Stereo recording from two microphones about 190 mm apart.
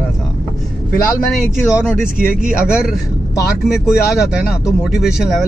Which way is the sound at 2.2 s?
50° right (ahead or behind).